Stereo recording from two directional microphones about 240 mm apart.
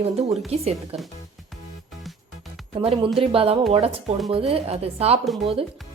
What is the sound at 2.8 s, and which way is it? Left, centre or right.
A woman's voice, right.